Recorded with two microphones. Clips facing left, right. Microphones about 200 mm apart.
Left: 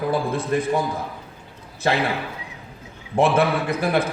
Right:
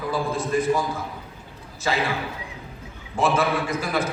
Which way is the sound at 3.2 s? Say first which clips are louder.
Left 3 dB; 60° left (ahead or behind).